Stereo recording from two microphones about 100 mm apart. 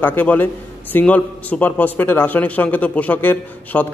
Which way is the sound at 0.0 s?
20° left (ahead or behind).